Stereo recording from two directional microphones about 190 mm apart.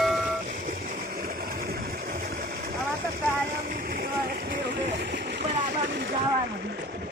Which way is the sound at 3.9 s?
50° right (ahead or behind).